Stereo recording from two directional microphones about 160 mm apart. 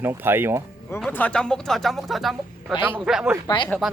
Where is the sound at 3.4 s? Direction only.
30° left (ahead or behind).